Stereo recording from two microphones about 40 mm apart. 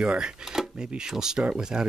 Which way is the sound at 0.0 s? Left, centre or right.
Right.